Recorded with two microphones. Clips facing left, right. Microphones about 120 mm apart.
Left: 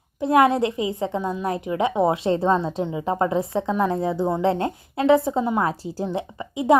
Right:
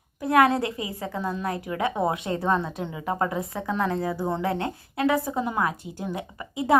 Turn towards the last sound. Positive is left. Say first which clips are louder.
# left 5 dB
turn(degrees=20)  # may be behind; listen again after turning